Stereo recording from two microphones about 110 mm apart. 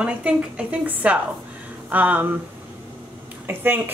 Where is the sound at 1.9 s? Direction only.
15° right (ahead or behind).